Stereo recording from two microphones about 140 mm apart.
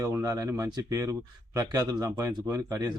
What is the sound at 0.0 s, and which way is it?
A man's voice, 25° right (ahead or behind).